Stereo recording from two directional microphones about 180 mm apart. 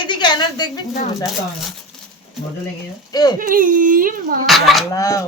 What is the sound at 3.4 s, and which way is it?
Speech, 50° right (ahead or behind).